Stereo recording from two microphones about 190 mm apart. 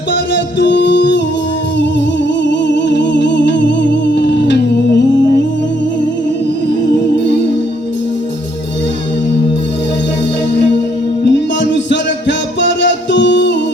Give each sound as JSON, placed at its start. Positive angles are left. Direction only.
{"t": 0.1, "sound": "music", "side_deg": 70}
{"t": 11.3, "sound": "music", "side_deg": 70}